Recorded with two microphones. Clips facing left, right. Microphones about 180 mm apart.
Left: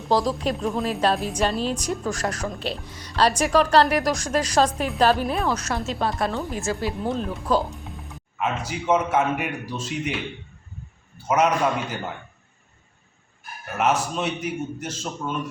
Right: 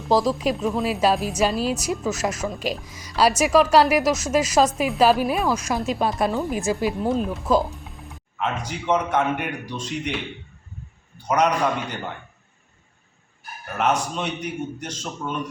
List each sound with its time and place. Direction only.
0.1 s a woman's voice: 10° right (ahead or behind)
11.3 s a man's voice: 5° left (ahead or behind)
13.7 s a man's voice: 5° left (ahead or behind)